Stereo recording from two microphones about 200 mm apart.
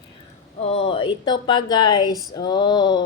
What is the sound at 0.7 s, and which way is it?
A woman's voice, 30° left (ahead or behind).